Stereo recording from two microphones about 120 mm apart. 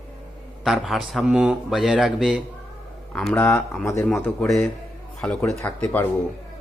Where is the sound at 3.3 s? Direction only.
25° left (ahead or behind).